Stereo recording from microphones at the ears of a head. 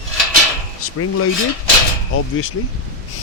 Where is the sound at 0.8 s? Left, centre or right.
Left.